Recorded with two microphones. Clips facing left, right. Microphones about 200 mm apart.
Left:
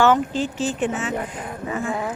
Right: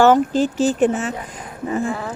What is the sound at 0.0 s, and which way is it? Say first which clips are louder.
Speech: right 4 dB; 40° right (ahead or behind).